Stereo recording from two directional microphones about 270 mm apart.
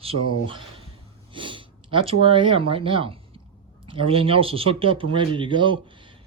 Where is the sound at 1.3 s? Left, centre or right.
Centre.